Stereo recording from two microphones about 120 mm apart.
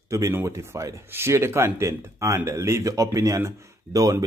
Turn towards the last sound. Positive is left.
turn(degrees=-30)  # may be behind; listen again after turning